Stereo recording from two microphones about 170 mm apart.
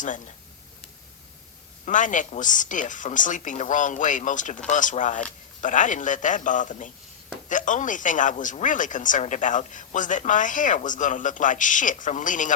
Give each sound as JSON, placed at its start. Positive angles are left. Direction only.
{"t": 1.8, "sound": "a woman's voice", "side_deg": 50}